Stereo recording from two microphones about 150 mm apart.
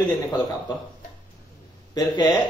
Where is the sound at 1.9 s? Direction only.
25° left (ahead or behind).